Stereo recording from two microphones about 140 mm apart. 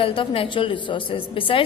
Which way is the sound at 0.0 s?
40° left (ahead or behind).